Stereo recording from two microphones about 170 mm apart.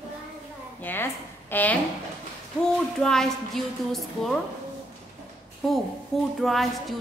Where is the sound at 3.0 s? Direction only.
5° left (ahead or behind).